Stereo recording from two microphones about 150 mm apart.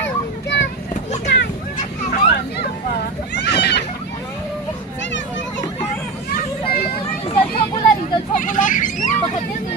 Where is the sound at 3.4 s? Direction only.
90° left.